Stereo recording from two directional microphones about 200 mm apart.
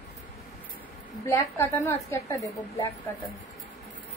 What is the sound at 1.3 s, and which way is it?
A woman's voice, 10° left (ahead or behind).